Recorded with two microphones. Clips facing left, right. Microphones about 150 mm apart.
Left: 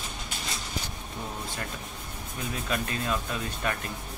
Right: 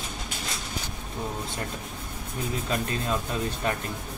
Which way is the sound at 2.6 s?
25° right (ahead or behind).